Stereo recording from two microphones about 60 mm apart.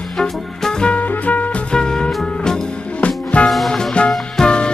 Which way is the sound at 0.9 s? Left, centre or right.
Left.